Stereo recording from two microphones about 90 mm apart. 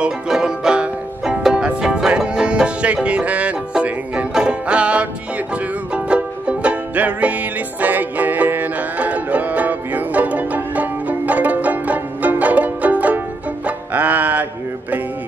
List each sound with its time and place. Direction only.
0.0 s music: 5° right (ahead or behind)